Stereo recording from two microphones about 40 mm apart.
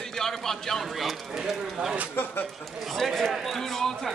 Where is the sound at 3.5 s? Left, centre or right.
Centre.